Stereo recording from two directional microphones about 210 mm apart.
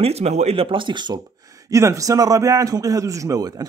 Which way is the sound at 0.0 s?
30° right (ahead or behind).